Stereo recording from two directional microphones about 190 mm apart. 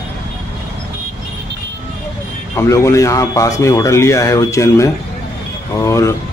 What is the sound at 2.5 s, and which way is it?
Speech, 15° left (ahead or behind).